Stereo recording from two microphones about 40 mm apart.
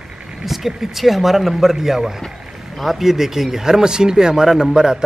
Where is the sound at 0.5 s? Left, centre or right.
Centre.